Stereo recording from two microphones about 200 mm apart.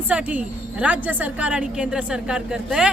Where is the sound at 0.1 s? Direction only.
5° right (ahead or behind).